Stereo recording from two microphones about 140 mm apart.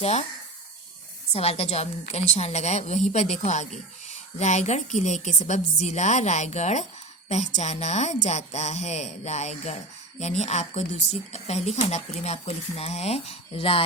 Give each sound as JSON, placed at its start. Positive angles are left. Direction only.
{"t": 0.0, "sound": "speech", "side_deg": 50}
{"t": 1.3, "sound": "a woman's voice", "side_deg": 45}